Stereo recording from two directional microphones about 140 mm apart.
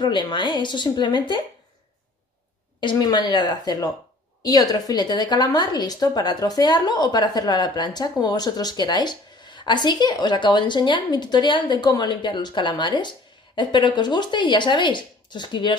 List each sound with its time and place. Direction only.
0.0 s a woman's voice: 35° left (ahead or behind)
2.8 s a woman's voice: 30° left (ahead or behind)